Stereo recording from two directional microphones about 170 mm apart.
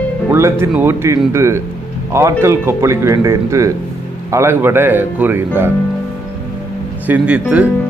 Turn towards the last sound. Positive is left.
turn(degrees=-10)  # may be behind; listen again after turning